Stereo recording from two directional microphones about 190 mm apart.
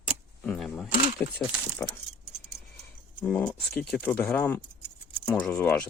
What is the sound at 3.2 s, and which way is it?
Speech, 5° left (ahead or behind).